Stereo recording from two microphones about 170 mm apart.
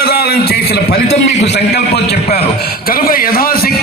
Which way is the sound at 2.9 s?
60° left (ahead or behind).